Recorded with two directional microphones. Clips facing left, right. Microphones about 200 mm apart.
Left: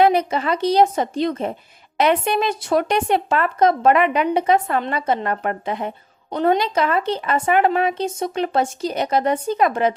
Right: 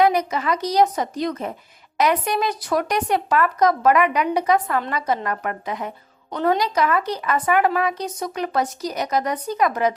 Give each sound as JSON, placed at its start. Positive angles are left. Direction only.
{"t": 0.0, "sound": "speech", "side_deg": 30}